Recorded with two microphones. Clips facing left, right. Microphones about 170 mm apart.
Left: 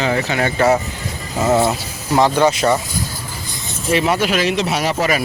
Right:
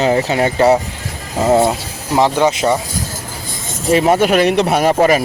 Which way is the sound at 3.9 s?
45° right (ahead or behind).